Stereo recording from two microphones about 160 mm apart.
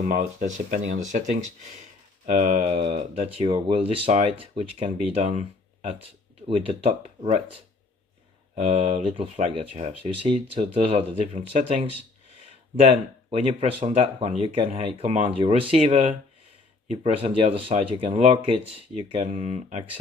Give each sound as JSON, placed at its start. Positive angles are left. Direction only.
{"t": 0.0, "sound": "speech", "side_deg": -55}
{"t": 2.2, "sound": "speech", "side_deg": -45}
{"t": 6.4, "sound": "speech", "side_deg": -35}
{"t": 8.6, "sound": "speech", "side_deg": -40}
{"t": 13.3, "sound": "speech", "side_deg": -35}
{"t": 16.8, "sound": "speech", "side_deg": -35}